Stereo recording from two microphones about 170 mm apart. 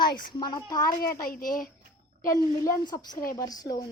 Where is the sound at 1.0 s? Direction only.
60° left (ahead or behind).